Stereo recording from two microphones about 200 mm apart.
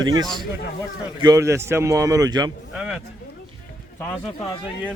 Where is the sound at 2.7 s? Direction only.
5° right (ahead or behind).